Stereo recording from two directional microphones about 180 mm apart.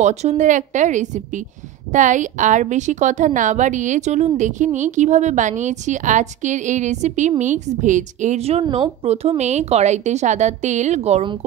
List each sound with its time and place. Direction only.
0.0 s a woman's voice: 40° right (ahead or behind)